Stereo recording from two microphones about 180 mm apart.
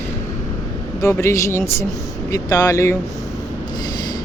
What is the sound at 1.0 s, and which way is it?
Speech, 15° left (ahead or behind).